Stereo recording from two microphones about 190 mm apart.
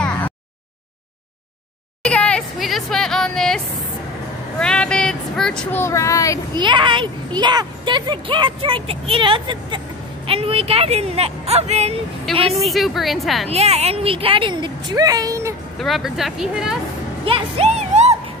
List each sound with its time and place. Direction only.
0.0 s a sound: 5° left (ahead or behind)
2.0 s a sound: 5° left (ahead or behind)
4.6 s speech: 5° left (ahead or behind)
6.5 s a child's voice: 25° right (ahead or behind)
12.3 s speech: centre (ahead or behind)
13.5 s a child's voice: 30° right (ahead or behind); by 15.5 s 15° right (ahead or behind)
15.8 s speech: centre (ahead or behind)
17.2 s music: 30° right (ahead or behind)